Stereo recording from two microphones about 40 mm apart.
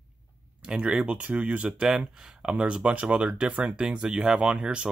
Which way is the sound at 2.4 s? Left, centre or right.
Right.